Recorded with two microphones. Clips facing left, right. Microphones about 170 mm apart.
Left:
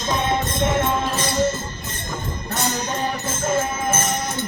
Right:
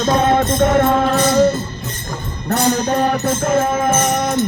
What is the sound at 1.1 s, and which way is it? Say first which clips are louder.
Music: right 9 dB; 50° right (ahead or behind).